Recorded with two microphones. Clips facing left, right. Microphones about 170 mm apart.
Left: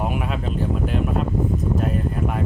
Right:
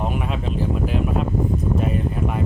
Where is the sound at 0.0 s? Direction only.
5° left (ahead or behind).